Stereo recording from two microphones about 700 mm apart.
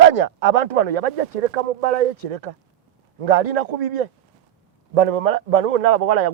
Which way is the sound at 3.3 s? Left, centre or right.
Right.